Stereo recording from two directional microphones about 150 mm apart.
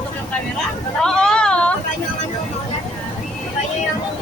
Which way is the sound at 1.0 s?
5° left (ahead or behind).